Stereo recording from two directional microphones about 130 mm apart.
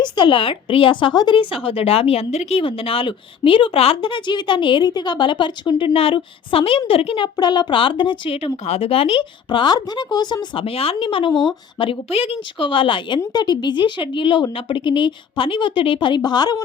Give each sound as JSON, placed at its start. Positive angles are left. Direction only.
{"t": 0.0, "sound": "a woman's voice", "side_deg": 40}
{"t": 7.3, "sound": "a woman's voice", "side_deg": 35}